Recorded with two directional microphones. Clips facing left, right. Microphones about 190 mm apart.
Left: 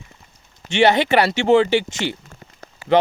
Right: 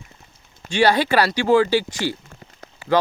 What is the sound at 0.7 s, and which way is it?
Speech, 25° left (ahead or behind).